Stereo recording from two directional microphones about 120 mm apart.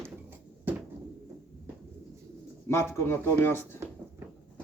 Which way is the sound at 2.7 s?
20° left (ahead or behind).